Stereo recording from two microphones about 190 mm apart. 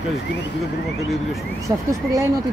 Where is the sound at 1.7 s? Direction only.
15° right (ahead or behind).